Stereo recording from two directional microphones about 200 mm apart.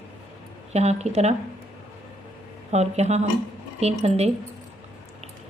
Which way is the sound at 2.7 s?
30° right (ahead or behind).